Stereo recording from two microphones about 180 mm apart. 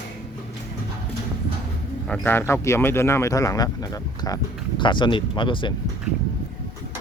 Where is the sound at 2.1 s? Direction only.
10° left (ahead or behind); by 5.7 s 25° left (ahead or behind).